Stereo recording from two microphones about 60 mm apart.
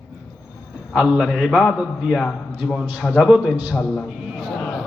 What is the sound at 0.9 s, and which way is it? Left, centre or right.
A man's voice, centre.